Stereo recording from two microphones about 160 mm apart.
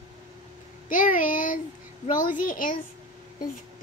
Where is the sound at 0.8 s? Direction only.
55° left (ahead or behind).